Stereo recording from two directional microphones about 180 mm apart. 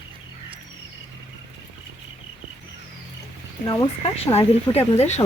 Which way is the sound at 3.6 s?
20° left (ahead or behind).